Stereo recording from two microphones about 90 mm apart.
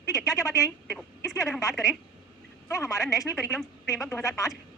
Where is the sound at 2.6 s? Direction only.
35° left (ahead or behind).